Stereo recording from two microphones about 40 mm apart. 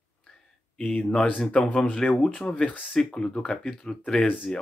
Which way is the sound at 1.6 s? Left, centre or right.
Centre.